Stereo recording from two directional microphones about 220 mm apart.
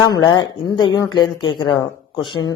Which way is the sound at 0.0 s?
20° left (ahead or behind).